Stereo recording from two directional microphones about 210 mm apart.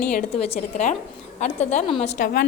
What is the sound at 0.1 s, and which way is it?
A woman's voice, 35° left (ahead or behind).